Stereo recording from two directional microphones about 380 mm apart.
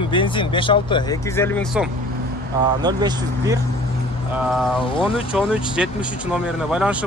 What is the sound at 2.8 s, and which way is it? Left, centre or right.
Speech, centre.